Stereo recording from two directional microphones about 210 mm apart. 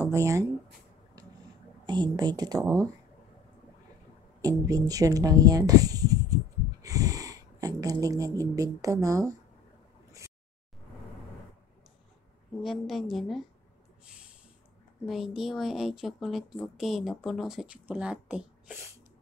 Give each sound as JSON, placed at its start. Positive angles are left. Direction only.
{"t": 0.0, "sound": "speech", "side_deg": -15}
{"t": 1.9, "sound": "speech", "side_deg": -20}
{"t": 4.4, "sound": "speech", "side_deg": -15}
{"t": 12.6, "sound": "speech", "side_deg": 0}
{"t": 15.0, "sound": "speech", "side_deg": 0}